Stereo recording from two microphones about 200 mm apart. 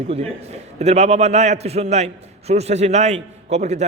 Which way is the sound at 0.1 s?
30° right (ahead or behind).